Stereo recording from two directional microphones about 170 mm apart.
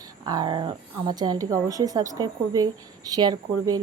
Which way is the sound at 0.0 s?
25° right (ahead or behind).